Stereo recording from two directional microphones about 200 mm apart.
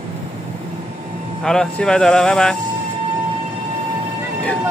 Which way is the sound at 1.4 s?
5° left (ahead or behind).